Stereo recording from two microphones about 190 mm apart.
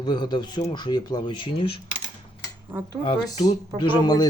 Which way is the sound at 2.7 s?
10° right (ahead or behind).